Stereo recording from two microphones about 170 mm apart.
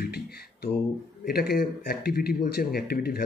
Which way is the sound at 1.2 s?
70° left (ahead or behind).